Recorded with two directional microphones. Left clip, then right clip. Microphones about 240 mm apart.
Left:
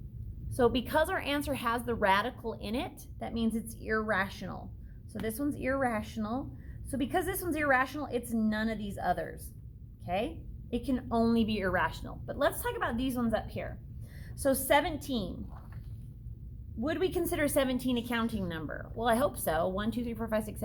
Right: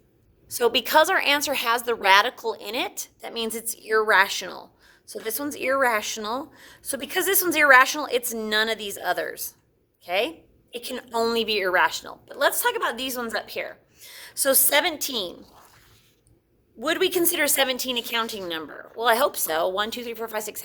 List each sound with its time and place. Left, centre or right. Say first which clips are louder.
0.4 s a woman's voice: right 6 dB; right
16.8 s a woman's voice: right 9 dB; right